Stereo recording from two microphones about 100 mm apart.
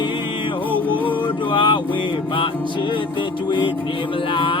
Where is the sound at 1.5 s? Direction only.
55° left (ahead or behind).